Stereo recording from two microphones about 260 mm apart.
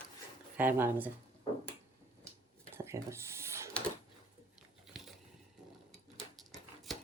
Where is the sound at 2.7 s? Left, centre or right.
Centre.